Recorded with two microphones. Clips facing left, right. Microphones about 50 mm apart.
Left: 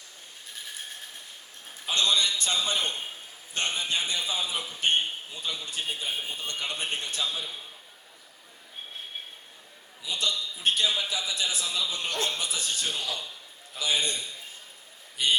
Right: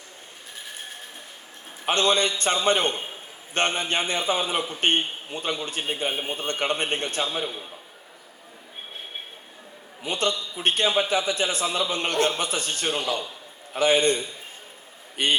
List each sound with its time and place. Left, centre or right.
1.8 s a man's voice: right
2.9 s a man's voice: right
3.5 s a man's voice: right
10.0 s a man's voice: right